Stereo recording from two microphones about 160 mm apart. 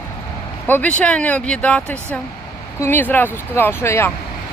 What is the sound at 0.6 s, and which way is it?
Speech, 10° left (ahead or behind).